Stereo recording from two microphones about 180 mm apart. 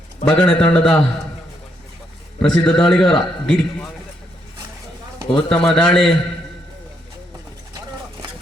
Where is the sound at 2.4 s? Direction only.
5° left (ahead or behind).